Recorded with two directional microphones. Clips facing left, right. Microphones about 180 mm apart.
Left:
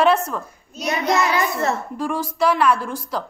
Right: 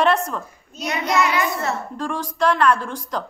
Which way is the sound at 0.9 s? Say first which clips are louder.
Left 1 dB; 35° left (ahead or behind).